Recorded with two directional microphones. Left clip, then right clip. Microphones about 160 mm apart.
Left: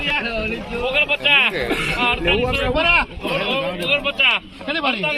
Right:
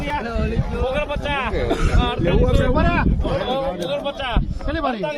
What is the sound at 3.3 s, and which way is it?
Speech, 20° right (ahead or behind).